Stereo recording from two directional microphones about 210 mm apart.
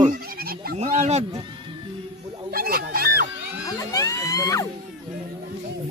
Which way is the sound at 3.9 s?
15° left (ahead or behind).